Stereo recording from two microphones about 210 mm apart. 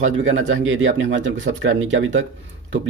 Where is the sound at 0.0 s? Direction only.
65° right (ahead or behind).